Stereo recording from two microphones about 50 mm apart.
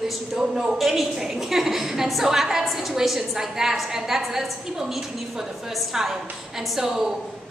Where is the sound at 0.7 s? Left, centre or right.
Centre.